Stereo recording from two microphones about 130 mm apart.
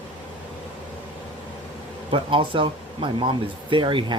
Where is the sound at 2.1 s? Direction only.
40° right (ahead or behind).